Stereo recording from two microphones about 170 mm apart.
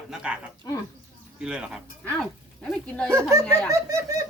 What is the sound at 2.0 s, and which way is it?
A man's voice, 5° left (ahead or behind).